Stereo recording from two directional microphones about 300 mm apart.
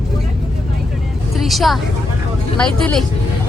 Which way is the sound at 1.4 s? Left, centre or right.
Centre.